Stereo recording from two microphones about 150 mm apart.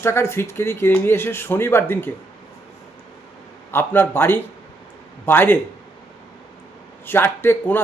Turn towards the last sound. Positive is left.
turn(degrees=15)  # may be behind; listen again after turning